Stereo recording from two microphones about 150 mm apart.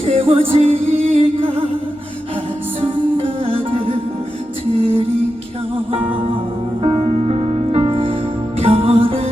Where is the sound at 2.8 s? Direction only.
35° right (ahead or behind).